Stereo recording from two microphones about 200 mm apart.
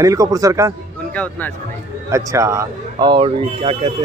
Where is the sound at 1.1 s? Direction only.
5° left (ahead or behind).